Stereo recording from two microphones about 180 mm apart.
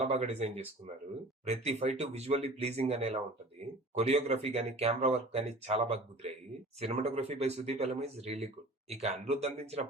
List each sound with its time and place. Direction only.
0.1 s speech: 35° right (ahead or behind)